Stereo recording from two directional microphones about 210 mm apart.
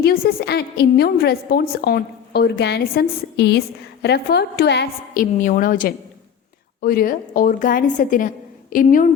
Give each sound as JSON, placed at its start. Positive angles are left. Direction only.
{"t": 0.0, "sound": "a woman's voice", "side_deg": 45}